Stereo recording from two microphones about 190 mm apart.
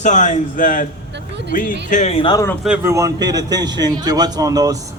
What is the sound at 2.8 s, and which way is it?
A man's voice, 15° right (ahead or behind).